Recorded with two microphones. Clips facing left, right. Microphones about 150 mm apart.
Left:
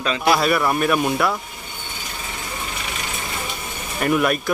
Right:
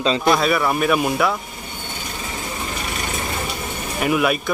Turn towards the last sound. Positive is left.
turn(degrees=-5)  # may be behind; listen again after turning